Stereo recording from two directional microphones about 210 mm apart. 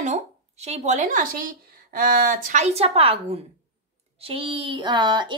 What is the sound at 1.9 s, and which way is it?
Speech, 45° right (ahead or behind).